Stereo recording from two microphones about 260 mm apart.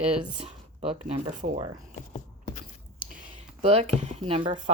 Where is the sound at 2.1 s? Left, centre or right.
Left.